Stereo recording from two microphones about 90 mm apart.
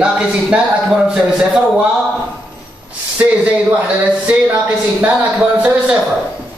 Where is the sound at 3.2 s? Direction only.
15° right (ahead or behind).